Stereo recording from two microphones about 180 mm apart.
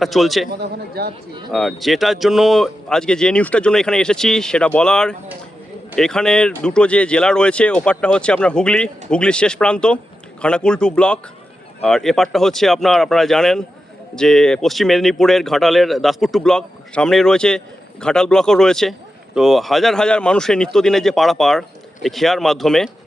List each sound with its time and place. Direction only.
0.0 s speech: centre (ahead or behind)
0.5 s speech: 65° right (ahead or behind)
1.5 s speech: centre (ahead or behind)